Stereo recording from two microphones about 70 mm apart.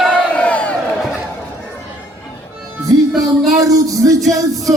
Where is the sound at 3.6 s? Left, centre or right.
Right.